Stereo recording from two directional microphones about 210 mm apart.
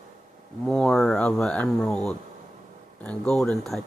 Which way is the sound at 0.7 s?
5° left (ahead or behind).